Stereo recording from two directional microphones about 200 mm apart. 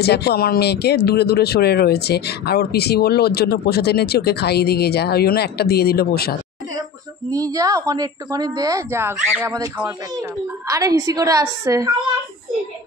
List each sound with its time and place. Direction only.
0.0 s speech: 55° left (ahead or behind)
7.2 s a woman's voice: 15° right (ahead or behind)